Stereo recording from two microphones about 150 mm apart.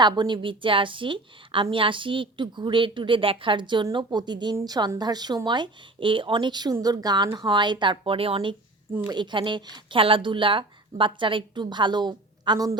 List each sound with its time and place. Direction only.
0.0 s a woman's voice: 30° right (ahead or behind)